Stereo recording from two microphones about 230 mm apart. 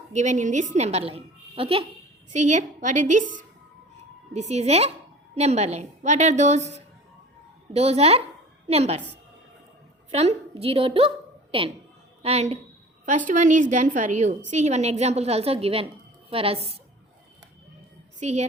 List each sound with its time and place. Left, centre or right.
0.1 s a woman's voice: right
10.1 s a woman's voice: right
18.2 s speech: right